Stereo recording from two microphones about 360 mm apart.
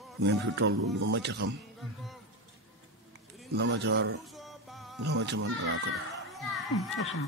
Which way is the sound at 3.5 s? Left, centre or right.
Right.